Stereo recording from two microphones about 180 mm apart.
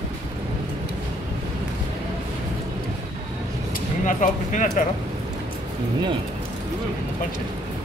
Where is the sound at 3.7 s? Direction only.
45° left (ahead or behind).